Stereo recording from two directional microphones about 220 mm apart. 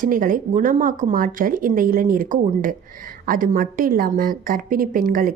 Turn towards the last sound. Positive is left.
turn(degrees=-40)  # may be behind; listen again after turning